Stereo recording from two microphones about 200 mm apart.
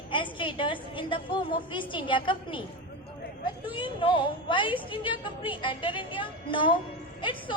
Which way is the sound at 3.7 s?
25° left (ahead or behind).